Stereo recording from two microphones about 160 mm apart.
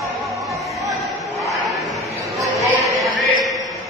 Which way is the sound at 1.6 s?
20° right (ahead or behind).